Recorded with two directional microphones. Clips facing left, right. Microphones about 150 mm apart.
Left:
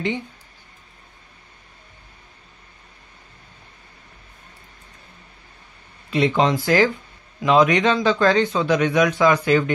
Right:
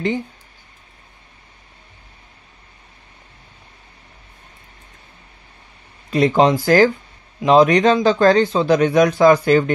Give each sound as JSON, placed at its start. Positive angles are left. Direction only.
{"t": 6.0, "sound": "a man's voice", "side_deg": -40}